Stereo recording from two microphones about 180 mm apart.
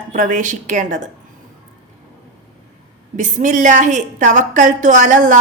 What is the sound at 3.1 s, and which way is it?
A woman's voice, 45° right (ahead or behind).